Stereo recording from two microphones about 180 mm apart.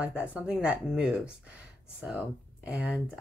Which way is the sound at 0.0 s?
5° right (ahead or behind).